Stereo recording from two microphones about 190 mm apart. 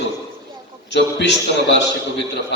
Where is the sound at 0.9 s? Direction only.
65° left (ahead or behind).